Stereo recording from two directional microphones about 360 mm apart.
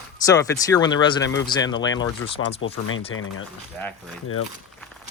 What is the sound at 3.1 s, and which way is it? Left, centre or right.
Speech, left.